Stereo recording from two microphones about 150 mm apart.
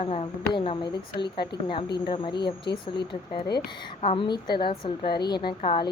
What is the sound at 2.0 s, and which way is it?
Speech, 35° left (ahead or behind).